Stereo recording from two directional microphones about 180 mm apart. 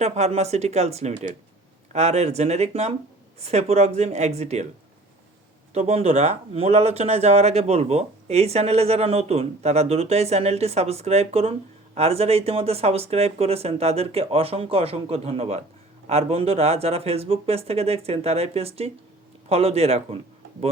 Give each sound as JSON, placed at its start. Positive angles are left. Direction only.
{"t": 0.0, "sound": "speech", "side_deg": -35}
{"t": 5.7, "sound": "speech", "side_deg": -35}